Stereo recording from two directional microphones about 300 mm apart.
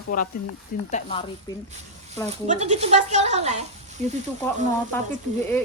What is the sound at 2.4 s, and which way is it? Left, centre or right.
Speech, right.